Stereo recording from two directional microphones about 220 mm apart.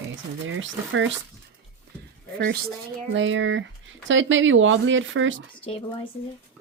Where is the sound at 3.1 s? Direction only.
55° right (ahead or behind).